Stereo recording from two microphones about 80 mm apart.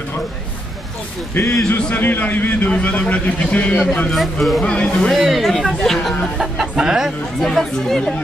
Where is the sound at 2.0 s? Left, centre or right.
Left.